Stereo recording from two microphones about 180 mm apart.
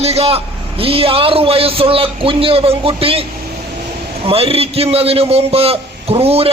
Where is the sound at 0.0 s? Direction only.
35° right (ahead or behind).